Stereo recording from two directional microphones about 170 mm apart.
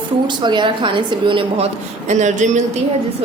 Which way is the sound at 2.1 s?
45° right (ahead or behind).